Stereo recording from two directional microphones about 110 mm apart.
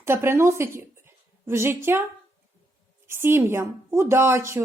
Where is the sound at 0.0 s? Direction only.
20° right (ahead or behind).